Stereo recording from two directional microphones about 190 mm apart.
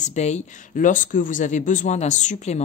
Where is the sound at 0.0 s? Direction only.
35° left (ahead or behind).